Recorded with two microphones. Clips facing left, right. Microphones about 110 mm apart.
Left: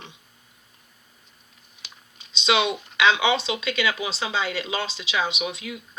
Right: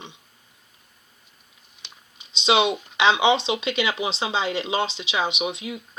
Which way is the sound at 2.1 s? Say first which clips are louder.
Right 2 dB; 25° right (ahead or behind).